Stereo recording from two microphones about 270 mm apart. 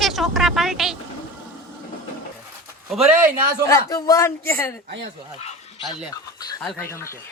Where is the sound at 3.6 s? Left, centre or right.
Centre.